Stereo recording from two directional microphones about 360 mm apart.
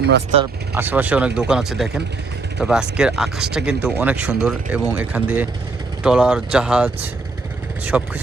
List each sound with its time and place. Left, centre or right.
0.0 s speech: right
0.8 s speech: centre